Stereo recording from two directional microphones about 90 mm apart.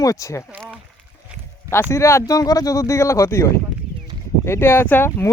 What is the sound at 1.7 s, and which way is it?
Speech, 30° left (ahead or behind).